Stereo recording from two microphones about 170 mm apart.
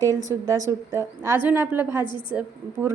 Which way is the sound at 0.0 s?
20° right (ahead or behind).